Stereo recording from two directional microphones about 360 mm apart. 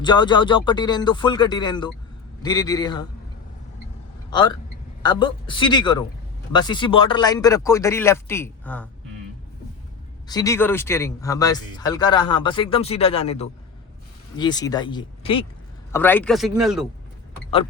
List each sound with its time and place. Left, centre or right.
0.0 s speech: centre
4.3 s a man's voice: centre
10.2 s speech: centre